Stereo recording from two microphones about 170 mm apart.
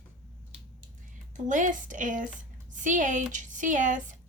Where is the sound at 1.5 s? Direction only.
50° right (ahead or behind).